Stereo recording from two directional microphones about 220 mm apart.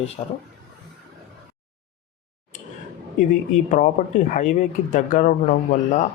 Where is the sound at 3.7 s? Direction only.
35° left (ahead or behind).